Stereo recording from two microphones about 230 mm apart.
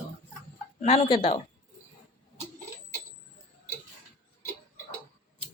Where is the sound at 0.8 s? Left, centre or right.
Left.